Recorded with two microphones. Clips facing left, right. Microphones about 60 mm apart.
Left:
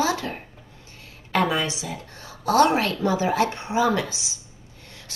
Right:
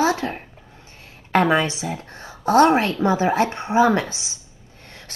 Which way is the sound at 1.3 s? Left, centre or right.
Right.